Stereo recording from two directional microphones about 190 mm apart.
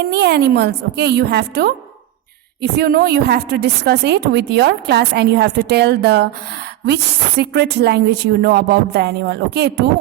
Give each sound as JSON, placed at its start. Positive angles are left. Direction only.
{"t": 0.0, "sound": "a woman's voice", "side_deg": -60}